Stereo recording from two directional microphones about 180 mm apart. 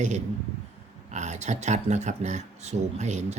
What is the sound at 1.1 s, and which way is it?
Speech, 40° right (ahead or behind).